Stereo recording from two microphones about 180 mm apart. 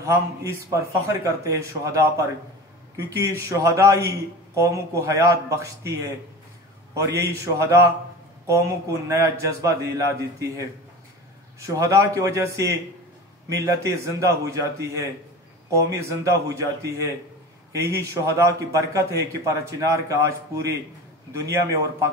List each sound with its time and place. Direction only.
0.0 s a man's voice: 15° right (ahead or behind)